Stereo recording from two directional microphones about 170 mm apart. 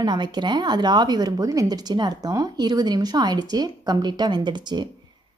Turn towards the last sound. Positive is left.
turn(degrees=-25)  # may be behind; listen again after turning